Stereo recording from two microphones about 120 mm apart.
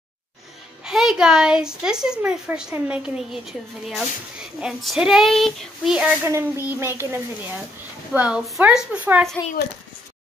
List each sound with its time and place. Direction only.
0.8 s a woman's voice: 5° right (ahead or behind)
6.2 s a child's voice: 20° right (ahead or behind)
8.1 s a woman's voice: 10° right (ahead or behind)